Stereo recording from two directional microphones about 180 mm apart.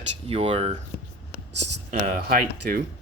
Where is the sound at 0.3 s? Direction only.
35° right (ahead or behind).